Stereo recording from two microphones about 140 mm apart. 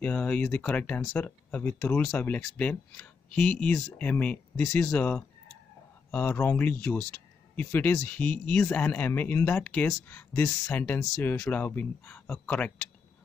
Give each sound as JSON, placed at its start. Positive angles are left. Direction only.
{"t": 0.0, "sound": "speech", "side_deg": 10}